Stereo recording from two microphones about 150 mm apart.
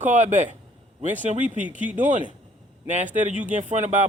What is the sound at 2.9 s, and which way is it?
A man's voice, 55° right (ahead or behind).